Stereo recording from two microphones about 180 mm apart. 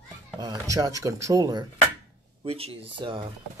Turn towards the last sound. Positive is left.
turn(degrees=-25)  # may be behind; listen again after turning